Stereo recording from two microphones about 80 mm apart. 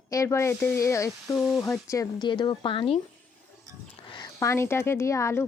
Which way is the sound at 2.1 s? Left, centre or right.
Left.